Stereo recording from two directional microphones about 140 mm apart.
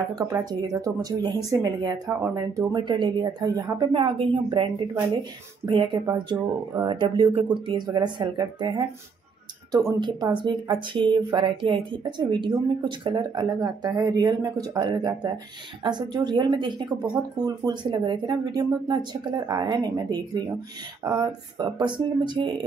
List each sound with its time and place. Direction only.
0.1 s speech: 25° right (ahead or behind)
3.9 s speech: 40° right (ahead or behind)
5.7 s speech: 35° right (ahead or behind)